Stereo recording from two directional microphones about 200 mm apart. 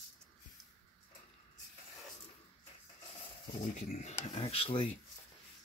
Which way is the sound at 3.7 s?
40° left (ahead or behind).